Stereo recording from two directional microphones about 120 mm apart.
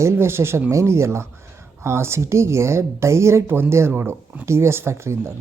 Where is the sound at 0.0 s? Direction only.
20° right (ahead or behind).